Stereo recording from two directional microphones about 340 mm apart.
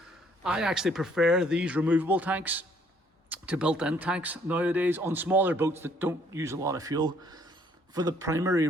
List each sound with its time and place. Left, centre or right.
0.4 s speech: centre